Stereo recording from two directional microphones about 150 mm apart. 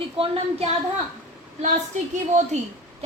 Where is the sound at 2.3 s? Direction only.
55° right (ahead or behind).